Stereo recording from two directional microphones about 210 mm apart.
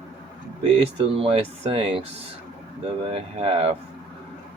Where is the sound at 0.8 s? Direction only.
25° right (ahead or behind).